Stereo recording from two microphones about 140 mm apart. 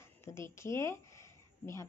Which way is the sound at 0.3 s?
20° left (ahead or behind).